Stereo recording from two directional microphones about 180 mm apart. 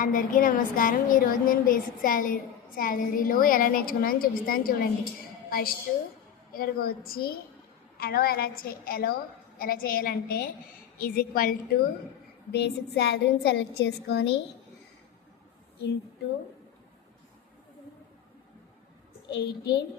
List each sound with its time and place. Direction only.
0.0 s a woman's voice: 50° left (ahead or behind)
12.5 s a woman's voice: 70° left (ahead or behind)
19.3 s a woman's voice: 65° left (ahead or behind)